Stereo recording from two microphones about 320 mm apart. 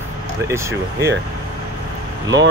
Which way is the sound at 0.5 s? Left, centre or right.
Centre.